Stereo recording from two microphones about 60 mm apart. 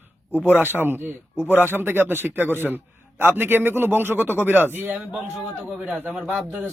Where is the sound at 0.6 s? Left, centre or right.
Right.